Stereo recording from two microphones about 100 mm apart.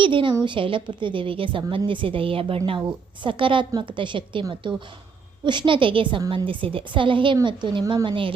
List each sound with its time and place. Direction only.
0.0 s a woman's voice: 55° right (ahead or behind)